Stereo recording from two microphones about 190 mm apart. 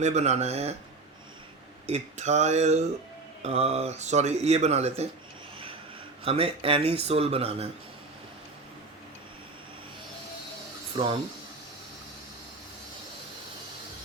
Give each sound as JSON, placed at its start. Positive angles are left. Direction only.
{"t": 0.0, "sound": "speech", "side_deg": -35}
{"t": 1.9, "sound": "speech", "side_deg": -35}
{"t": 6.2, "sound": "speech", "side_deg": -30}
{"t": 10.9, "sound": "speech", "side_deg": -30}